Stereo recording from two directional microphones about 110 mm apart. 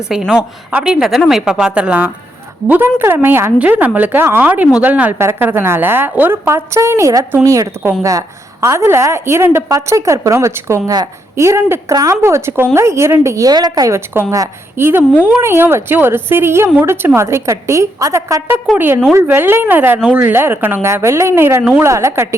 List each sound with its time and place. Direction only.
0.1 s a woman's voice: 5° right (ahead or behind); by 14.0 s 35° right (ahead or behind)
14.1 s a woman's voice: 25° right (ahead or behind)
18.7 s a woman's voice: 5° left (ahead or behind)
19.1 s a woman's voice: 20° right (ahead or behind)